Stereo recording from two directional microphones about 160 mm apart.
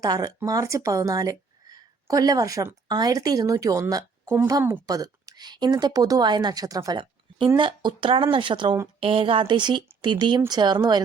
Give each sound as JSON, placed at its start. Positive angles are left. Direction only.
{"t": 0.0, "sound": "a woman's voice", "side_deg": -25}